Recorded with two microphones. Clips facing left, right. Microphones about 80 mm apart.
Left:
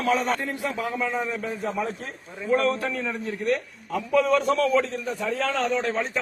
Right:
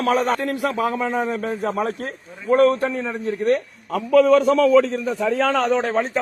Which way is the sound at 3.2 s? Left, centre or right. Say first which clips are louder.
Right 8 dB; right.